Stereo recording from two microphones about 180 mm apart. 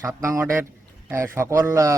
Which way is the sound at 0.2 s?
15° right (ahead or behind).